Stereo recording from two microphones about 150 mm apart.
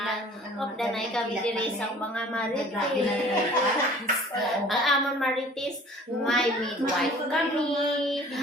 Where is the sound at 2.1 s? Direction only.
10° left (ahead or behind).